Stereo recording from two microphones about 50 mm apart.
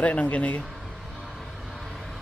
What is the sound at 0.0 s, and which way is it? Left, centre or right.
Speech, left.